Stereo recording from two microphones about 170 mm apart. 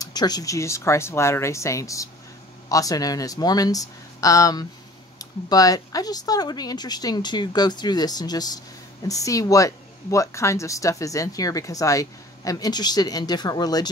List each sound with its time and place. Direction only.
0.0 s a woman's voice: 25° left (ahead or behind)